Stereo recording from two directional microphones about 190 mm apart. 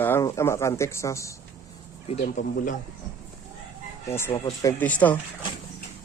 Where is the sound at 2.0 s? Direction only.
40° left (ahead or behind).